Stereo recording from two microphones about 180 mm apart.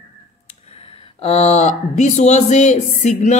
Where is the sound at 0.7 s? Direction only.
35° left (ahead or behind).